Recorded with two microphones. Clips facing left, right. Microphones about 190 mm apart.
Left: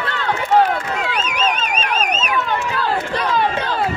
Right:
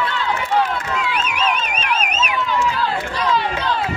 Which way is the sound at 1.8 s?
40° left (ahead or behind).